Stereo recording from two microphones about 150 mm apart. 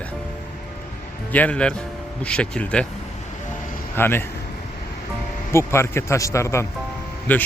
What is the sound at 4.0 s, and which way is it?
Speech, 15° left (ahead or behind).